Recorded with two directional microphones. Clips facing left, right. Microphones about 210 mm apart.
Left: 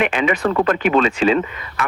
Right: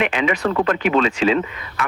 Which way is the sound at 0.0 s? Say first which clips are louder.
Left 2 dB; 45° left (ahead or behind).